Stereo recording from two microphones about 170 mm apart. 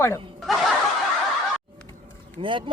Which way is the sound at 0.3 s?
Centre (ahead or behind).